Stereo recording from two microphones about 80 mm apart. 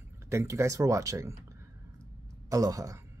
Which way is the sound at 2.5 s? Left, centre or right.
Right.